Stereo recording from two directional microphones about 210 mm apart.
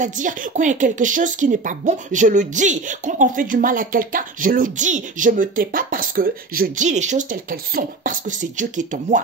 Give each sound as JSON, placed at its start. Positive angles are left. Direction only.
{"t": 0.0, "sound": "speech", "side_deg": -35}